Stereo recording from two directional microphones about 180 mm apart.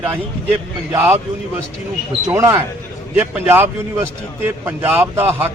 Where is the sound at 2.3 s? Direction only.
15° right (ahead or behind).